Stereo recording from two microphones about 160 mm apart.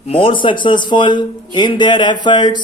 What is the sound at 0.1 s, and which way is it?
Speech, 30° left (ahead or behind).